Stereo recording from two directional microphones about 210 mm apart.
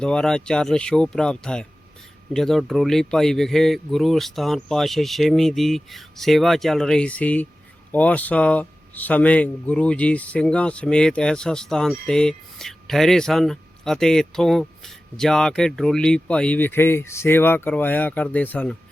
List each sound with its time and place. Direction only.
0.0 s speech: 5° left (ahead or behind)